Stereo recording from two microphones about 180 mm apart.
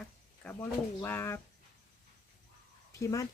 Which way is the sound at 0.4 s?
5° left (ahead or behind).